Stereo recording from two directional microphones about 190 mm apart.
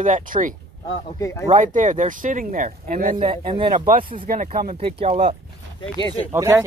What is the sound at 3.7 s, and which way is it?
Speech, 45° right (ahead or behind).